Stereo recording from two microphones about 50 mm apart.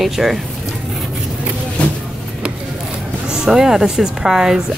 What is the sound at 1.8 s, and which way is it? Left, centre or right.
Vehicle, left.